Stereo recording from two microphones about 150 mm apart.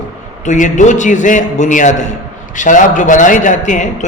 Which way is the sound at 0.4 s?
55° left (ahead or behind).